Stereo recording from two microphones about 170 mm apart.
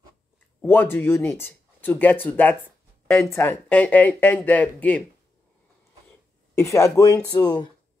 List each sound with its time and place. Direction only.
0.6 s speech: 10° left (ahead or behind)
6.5 s speech: 15° left (ahead or behind)